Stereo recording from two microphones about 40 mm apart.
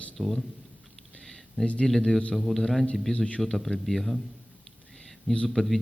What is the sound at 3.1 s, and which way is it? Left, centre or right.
Speech, left.